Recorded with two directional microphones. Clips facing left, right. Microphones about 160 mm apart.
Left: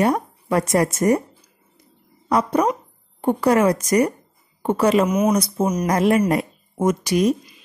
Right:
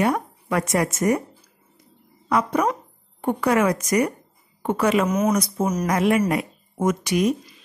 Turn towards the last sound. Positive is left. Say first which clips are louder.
# left 2 dB
turn(degrees=35)  # may be behind; listen again after turning